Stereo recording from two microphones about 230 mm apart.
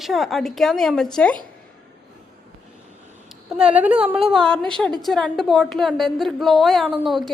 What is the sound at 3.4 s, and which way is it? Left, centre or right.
A woman's voice, centre.